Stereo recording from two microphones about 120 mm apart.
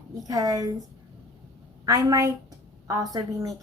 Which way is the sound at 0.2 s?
30° right (ahead or behind).